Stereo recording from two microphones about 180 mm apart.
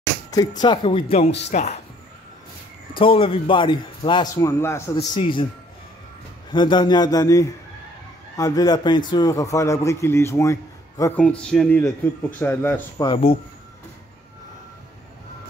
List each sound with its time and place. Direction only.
0.6 s speech: 25° left (ahead or behind)
3.0 s a man's voice: 30° left (ahead or behind); by 4.9 s 15° left (ahead or behind)
4.9 s a man's voice: 30° left (ahead or behind)
6.5 s a man's voice: 25° left (ahead or behind)